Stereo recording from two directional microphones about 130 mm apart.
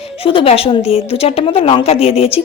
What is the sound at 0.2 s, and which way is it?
Speech, 45° left (ahead or behind).